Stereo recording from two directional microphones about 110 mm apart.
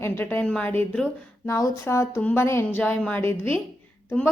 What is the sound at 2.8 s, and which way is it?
Speech, 10° left (ahead or behind).